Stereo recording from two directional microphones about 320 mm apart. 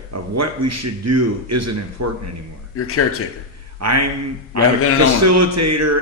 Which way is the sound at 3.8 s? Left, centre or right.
Right.